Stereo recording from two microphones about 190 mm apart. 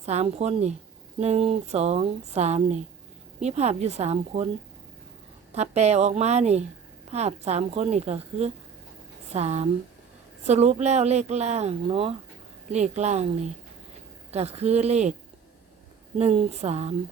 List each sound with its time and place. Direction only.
0.0 s speech: 35° right (ahead or behind)
5.5 s speech: 35° right (ahead or behind)
14.3 s speech: 35° right (ahead or behind)
16.1 s speech: 35° right (ahead or behind)